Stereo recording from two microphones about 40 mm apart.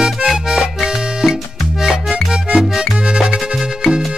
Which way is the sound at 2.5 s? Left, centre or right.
Centre.